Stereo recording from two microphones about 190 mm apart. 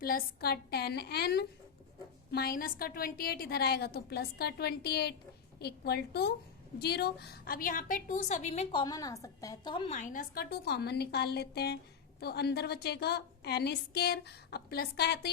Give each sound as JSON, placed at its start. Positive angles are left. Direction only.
{"t": 0.0, "sound": "a woman's voice", "side_deg": 50}
{"t": 9.9, "sound": "a woman's voice", "side_deg": 40}